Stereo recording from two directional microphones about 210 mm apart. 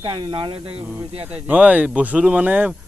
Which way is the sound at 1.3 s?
5° right (ahead or behind).